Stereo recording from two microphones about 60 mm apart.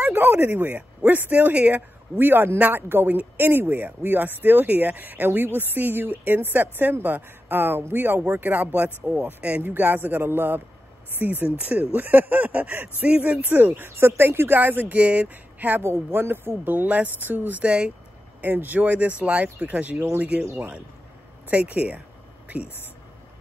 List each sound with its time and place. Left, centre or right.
0.0 s speech: right
11.4 s speech: right
15.8 s speech: right
16.7 s speech: right
18.4 s speech: right
20.4 s speech: right
21.5 s speech: right